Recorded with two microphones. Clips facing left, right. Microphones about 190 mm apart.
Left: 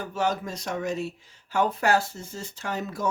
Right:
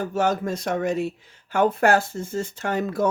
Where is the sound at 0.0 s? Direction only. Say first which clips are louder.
Right 5 dB; 50° right (ahead or behind).